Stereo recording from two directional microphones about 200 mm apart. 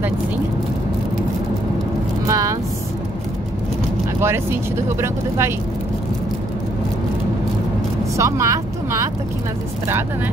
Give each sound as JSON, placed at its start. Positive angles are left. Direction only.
{"t": 2.2, "sound": "vehicle", "side_deg": -15}
{"t": 4.8, "sound": "speech", "side_deg": -15}
{"t": 8.2, "sound": "speech", "side_deg": -15}